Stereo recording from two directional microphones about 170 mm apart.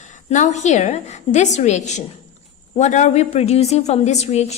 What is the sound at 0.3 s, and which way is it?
A woman's voice, 45° left (ahead or behind).